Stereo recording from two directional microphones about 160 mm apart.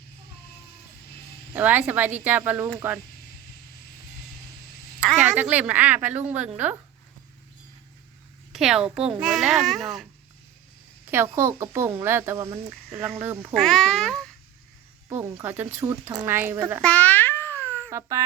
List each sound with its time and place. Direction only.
1.5 s speech: 10° right (ahead or behind)
5.2 s speech: 10° right (ahead or behind)
8.5 s a woman's voice: centre (ahead or behind)
11.1 s speech: 15° right (ahead or behind)
13.5 s a child's voice: centre (ahead or behind)
15.1 s speech: 15° right (ahead or behind)
16.8 s babbling: 10° left (ahead or behind)